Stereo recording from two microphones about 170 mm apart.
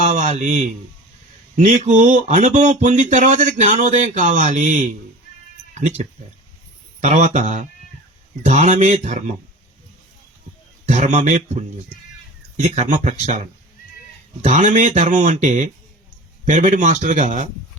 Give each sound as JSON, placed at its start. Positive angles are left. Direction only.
{"t": 0.0, "sound": "a sound", "side_deg": -45}
{"t": 1.5, "sound": "speech", "side_deg": -45}
{"t": 10.8, "sound": "speech", "side_deg": -45}